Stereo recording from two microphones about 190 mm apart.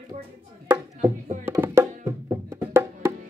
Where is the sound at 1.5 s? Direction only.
10° right (ahead or behind).